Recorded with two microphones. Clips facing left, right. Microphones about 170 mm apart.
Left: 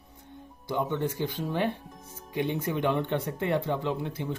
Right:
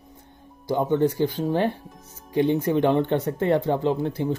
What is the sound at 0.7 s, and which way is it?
Speech, 35° right (ahead or behind).